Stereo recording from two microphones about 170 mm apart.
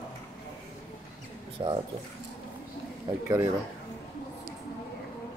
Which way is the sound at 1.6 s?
25° right (ahead or behind).